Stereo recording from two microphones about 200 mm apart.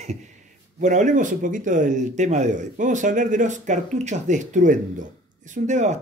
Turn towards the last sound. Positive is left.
turn(degrees=-35)  # may be behind; listen again after turning